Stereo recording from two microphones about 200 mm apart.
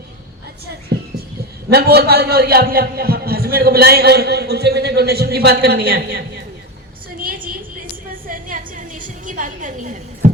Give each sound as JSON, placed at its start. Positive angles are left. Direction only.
{"t": 0.9, "sound": "music", "side_deg": -55}
{"t": 1.7, "sound": "a man's voice", "side_deg": -50}
{"t": 7.2, "sound": "a sound", "side_deg": -45}